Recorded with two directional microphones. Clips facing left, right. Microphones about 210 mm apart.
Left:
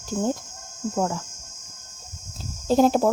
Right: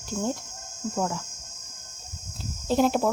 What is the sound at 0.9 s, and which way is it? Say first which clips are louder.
Speech: left 3 dB; 45° left (ahead or behind).